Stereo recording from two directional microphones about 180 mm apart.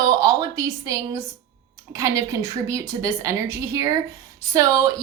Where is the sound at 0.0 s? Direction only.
20° right (ahead or behind).